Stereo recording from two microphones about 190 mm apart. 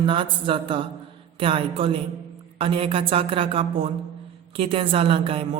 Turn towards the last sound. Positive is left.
turn(degrees=-30)  # may be behind; listen again after turning